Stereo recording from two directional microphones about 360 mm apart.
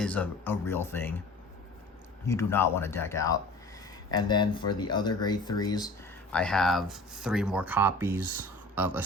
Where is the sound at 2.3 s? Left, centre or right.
Centre.